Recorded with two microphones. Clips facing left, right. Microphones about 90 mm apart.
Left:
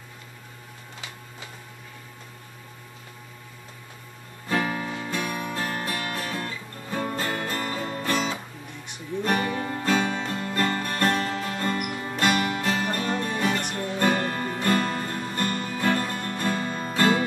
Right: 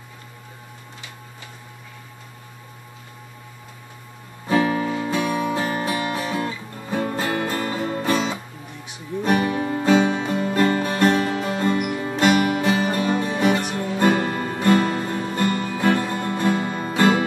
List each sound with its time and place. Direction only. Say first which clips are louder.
4.5 s music: right 7 dB; 10° right (ahead or behind)
4.9 s music: right 7 dB; 25° right (ahead or behind)